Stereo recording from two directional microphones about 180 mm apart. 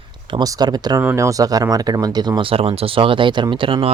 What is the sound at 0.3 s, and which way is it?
Speech, 20° right (ahead or behind).